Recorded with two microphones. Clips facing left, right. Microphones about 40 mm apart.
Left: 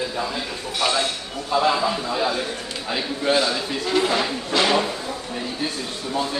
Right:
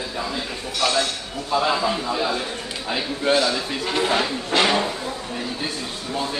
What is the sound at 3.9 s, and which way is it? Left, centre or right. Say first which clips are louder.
Speech: left 1 dB; right.